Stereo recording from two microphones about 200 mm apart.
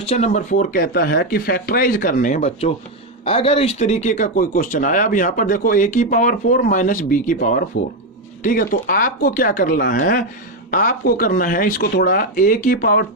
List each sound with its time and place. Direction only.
0.0 s speech: 30° left (ahead or behind); by 13.1 s 45° left (ahead or behind)